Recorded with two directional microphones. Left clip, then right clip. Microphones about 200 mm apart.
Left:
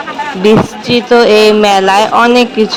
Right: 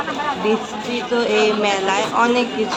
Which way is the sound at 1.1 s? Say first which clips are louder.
Left 12 dB; 45° left (ahead or behind).